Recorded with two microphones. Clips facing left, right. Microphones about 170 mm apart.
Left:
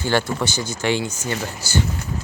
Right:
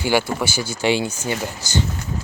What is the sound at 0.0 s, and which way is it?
Speech, 5° right (ahead or behind).